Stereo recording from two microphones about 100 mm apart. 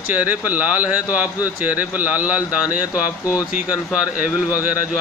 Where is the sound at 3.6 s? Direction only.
15° right (ahead or behind).